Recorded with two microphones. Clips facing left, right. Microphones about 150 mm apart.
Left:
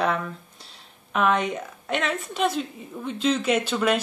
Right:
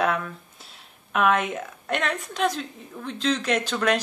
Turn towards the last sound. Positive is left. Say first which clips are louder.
# left 1 dB
turn(degrees=5)  # may be behind; listen again after turning